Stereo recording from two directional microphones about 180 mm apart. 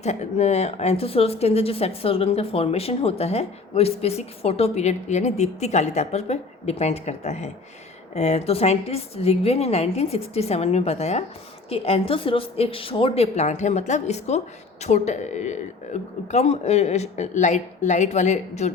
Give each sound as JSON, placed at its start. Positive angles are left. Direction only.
{"t": 0.0, "sound": "a woman's voice", "side_deg": 40}